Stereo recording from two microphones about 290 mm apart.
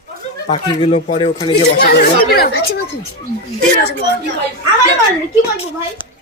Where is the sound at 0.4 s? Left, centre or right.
Centre.